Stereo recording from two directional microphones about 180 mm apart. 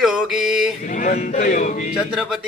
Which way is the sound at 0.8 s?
50° left (ahead or behind).